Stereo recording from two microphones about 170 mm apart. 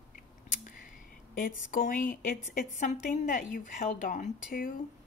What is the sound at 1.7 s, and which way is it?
Speech, 50° left (ahead or behind).